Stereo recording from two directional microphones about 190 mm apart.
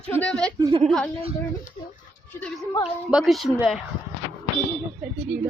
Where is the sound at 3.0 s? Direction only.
Centre (ahead or behind).